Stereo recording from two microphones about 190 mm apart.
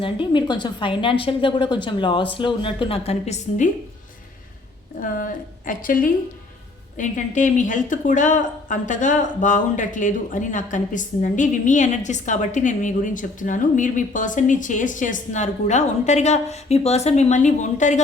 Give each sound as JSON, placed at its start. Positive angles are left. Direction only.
{"t": 0.0, "sound": "a woman's voice", "side_deg": 25}
{"t": 4.9, "sound": "a woman's voice", "side_deg": 45}